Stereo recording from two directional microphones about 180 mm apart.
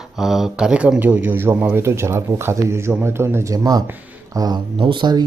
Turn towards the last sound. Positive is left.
turn(degrees=-25)  # may be behind; listen again after turning